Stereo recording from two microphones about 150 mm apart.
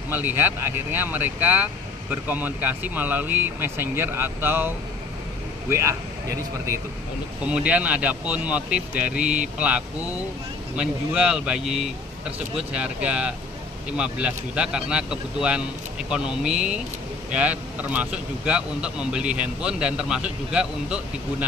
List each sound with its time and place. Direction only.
0.1 s speech: 15° right (ahead or behind)
7.4 s speech: 10° right (ahead or behind)